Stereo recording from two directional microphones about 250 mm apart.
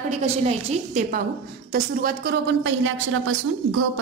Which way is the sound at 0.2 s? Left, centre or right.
Right.